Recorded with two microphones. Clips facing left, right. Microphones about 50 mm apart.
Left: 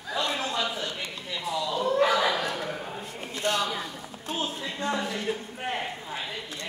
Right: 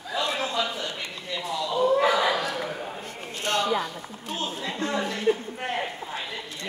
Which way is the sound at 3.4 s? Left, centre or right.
Right.